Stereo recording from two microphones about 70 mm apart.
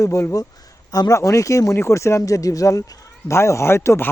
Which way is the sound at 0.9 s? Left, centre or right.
Left.